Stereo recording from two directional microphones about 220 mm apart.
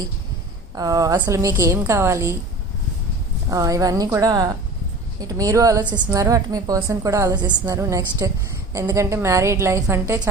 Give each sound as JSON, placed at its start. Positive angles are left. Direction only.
{"t": 0.8, "sound": "a woman's voice", "side_deg": -15}
{"t": 3.5, "sound": "a woman's voice", "side_deg": -15}